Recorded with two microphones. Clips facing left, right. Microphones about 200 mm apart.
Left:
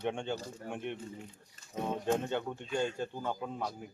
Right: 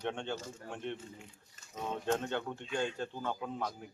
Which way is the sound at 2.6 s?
45° left (ahead or behind).